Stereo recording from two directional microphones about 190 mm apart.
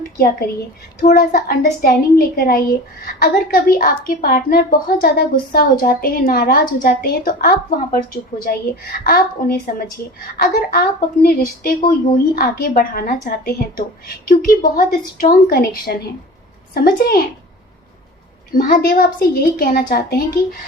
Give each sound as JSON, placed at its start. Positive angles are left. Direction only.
{"t": 1.0, "sound": "a woman's voice", "side_deg": 45}
{"t": 18.5, "sound": "a woman's voice", "side_deg": 45}